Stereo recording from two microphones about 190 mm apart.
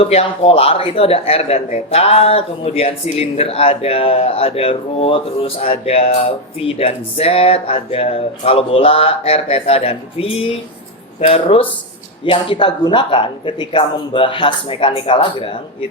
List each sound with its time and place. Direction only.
0.0 s speech: 30° left (ahead or behind)